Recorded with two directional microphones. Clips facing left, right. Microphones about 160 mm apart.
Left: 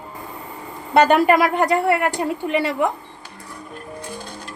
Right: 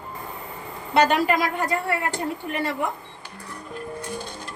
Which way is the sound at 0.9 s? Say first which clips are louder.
Left 5 dB; 55° left (ahead or behind).